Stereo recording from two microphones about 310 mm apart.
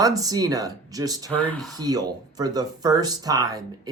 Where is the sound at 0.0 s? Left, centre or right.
Centre.